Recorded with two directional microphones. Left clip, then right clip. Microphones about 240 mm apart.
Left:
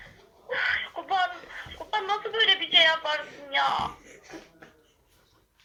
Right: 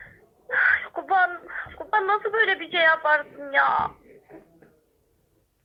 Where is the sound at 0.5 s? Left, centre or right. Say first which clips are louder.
Right 6 dB; right.